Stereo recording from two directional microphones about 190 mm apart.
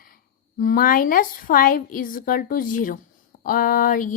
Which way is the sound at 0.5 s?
45° left (ahead or behind).